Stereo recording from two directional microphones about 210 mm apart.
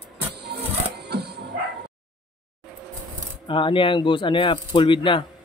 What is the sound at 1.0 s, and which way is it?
Bow-wow, 50° right (ahead or behind).